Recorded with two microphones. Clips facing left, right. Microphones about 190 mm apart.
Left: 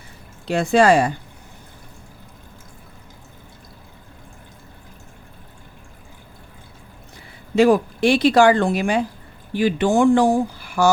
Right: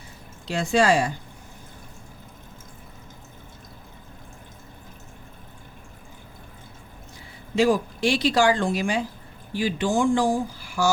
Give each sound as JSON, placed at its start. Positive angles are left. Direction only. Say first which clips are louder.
{"t": 0.4, "sound": "speech", "louder": "left 5 dB", "side_deg": 55}
{"t": 7.5, "sound": "speech", "louder": "left 6 dB", "side_deg": 60}